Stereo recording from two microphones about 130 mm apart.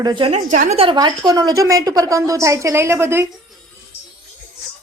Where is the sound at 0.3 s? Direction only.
70° right (ahead or behind).